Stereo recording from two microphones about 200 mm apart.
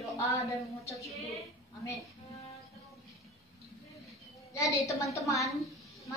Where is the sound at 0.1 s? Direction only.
15° left (ahead or behind).